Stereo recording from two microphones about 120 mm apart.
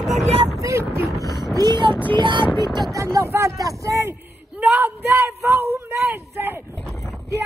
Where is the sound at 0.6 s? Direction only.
25° right (ahead or behind).